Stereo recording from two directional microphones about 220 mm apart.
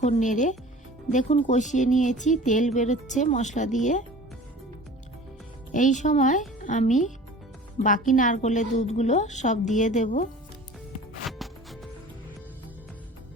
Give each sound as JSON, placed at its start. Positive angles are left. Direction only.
{"t": 0.0, "sound": "speech", "side_deg": 35}
{"t": 5.7, "sound": "speech", "side_deg": 35}
{"t": 11.3, "sound": "music", "side_deg": 0}